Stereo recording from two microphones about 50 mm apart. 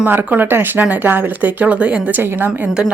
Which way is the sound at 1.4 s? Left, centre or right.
Right.